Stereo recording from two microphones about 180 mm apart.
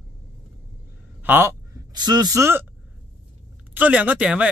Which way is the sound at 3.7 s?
10° right (ahead or behind).